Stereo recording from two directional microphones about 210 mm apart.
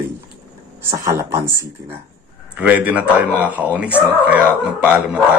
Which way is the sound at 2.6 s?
5° right (ahead or behind).